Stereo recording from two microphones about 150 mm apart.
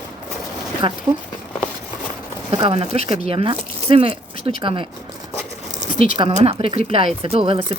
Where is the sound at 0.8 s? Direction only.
35° right (ahead or behind).